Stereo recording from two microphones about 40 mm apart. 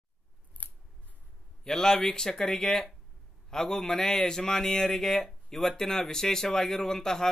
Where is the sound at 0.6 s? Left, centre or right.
Left.